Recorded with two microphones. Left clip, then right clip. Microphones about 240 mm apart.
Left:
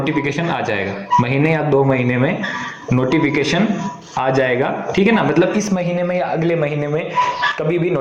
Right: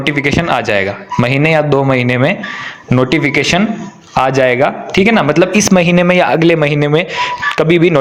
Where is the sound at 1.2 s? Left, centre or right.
Right.